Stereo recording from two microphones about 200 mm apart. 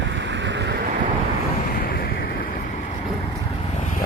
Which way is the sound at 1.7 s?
50° left (ahead or behind).